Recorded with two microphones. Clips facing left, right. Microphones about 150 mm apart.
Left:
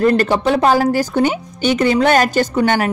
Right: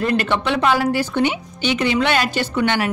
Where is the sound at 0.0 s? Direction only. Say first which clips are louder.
Left 6 dB; 40° left (ahead or behind).